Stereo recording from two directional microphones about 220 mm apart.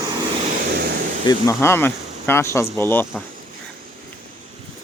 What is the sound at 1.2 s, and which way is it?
Speech, 15° left (ahead or behind).